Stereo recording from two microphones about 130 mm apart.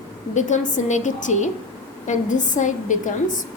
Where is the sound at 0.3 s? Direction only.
70° left (ahead or behind).